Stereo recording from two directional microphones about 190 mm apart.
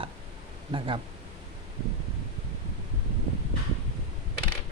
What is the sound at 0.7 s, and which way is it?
Speech, 30° right (ahead or behind).